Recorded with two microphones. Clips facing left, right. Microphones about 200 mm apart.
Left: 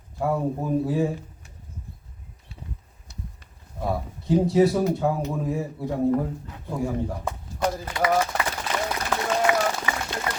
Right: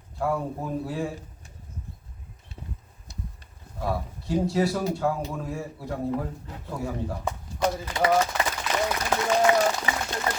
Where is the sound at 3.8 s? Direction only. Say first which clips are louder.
Left 2 dB; 20° left (ahead or behind).